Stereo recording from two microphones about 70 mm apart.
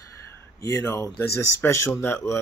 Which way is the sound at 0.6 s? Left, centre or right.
Left.